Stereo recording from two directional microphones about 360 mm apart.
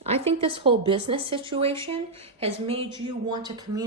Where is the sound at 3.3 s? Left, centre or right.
Centre.